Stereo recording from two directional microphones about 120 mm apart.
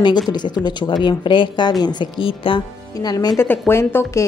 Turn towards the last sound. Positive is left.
turn(degrees=20)  # may be behind; listen again after turning